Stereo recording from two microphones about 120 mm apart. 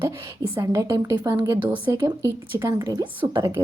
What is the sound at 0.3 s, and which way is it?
A woman's voice, 25° right (ahead or behind).